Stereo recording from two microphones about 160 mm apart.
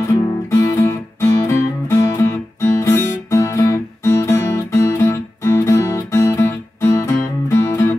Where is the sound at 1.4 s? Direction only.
15° left (ahead or behind).